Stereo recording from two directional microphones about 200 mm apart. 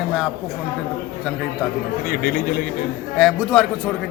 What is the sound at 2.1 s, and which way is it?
Speech, 45° left (ahead or behind).